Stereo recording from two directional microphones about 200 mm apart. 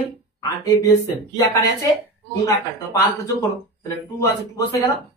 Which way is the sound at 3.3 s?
15° left (ahead or behind).